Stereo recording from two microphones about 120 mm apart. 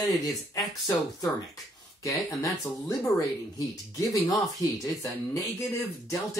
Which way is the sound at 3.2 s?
30° left (ahead or behind).